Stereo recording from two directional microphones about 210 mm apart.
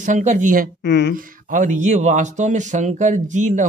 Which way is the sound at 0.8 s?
55° left (ahead or behind).